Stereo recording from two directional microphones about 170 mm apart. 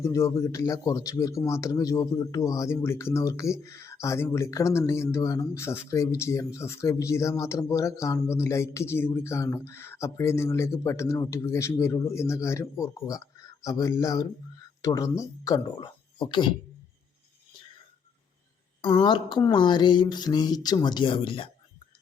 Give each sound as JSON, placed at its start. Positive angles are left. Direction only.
{"t": 0.0, "sound": "speech", "side_deg": 20}
{"t": 18.8, "sound": "speech", "side_deg": 30}